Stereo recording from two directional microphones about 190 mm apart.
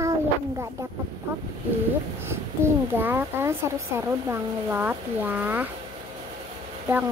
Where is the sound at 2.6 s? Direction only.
10° right (ahead or behind).